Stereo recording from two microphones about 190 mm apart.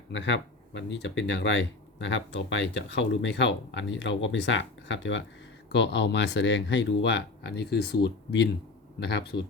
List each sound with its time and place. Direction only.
0.1 s speech: 70° left (ahead or behind)